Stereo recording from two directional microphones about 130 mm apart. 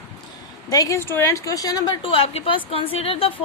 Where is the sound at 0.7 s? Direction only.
25° left (ahead or behind).